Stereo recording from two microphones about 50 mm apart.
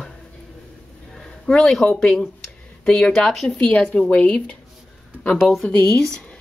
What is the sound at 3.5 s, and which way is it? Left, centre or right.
Speech, left.